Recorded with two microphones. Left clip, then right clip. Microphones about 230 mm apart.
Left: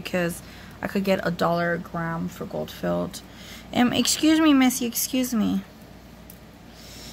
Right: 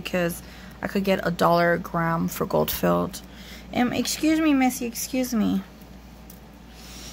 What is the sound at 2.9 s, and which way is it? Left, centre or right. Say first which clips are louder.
Speech: right 3 dB; centre.